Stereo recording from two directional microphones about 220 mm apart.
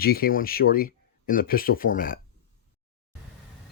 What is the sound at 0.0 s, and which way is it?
Speech, 45° left (ahead or behind).